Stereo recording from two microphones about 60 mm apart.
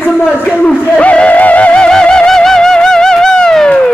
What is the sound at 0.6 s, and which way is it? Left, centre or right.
Music, centre.